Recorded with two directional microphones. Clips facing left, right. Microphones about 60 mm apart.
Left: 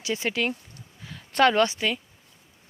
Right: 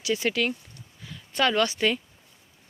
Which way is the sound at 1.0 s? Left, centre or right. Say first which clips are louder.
Left 5 dB; left.